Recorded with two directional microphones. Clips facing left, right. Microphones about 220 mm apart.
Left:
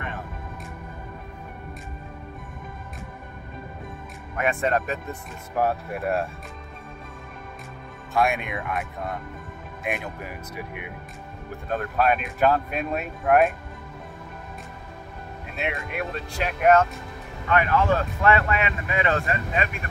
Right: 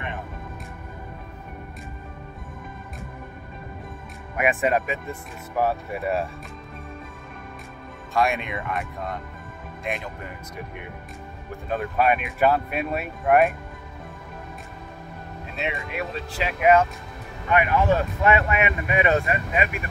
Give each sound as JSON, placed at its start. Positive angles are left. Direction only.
{"t": 4.4, "sound": "speech", "side_deg": -15}
{"t": 8.1, "sound": "speech", "side_deg": 0}
{"t": 11.7, "sound": "speech", "side_deg": -5}
{"t": 15.5, "sound": "speech", "side_deg": 0}
{"t": 17.5, "sound": "speech", "side_deg": -15}